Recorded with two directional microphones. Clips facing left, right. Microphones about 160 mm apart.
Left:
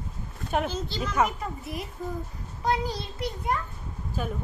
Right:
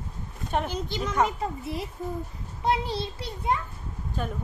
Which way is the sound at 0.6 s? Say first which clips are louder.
Even; 15° right (ahead or behind).